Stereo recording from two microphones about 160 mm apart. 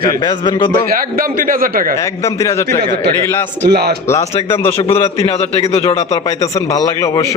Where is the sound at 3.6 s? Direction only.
90° right.